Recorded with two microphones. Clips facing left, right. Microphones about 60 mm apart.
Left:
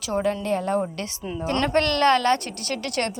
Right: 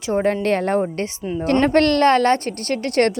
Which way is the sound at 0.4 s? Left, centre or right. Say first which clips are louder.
Right 5 dB; right.